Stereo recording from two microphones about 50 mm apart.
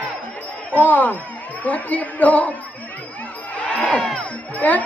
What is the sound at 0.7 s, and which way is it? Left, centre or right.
Speech, left.